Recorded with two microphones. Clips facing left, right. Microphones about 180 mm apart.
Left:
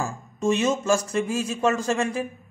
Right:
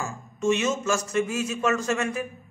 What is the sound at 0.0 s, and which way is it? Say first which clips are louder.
Speech: left 1 dB; 35° left (ahead or behind).